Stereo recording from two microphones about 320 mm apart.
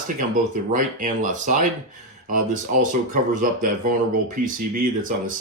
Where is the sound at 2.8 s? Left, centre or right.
Right.